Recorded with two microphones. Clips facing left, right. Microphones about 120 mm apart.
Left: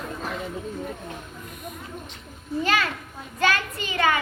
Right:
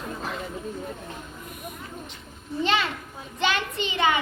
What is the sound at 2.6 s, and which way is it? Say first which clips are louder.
A child's voice: even; 25° right (ahead or behind).